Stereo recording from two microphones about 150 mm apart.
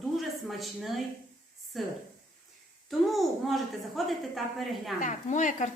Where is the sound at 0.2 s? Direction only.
Centre (ahead or behind).